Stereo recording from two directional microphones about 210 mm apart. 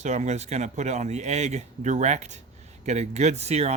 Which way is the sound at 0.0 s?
35° right (ahead or behind).